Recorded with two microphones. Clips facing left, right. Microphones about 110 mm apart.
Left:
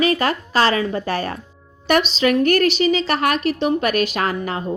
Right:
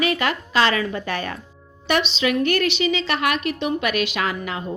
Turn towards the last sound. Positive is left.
turn(degrees=40)  # may be behind; listen again after turning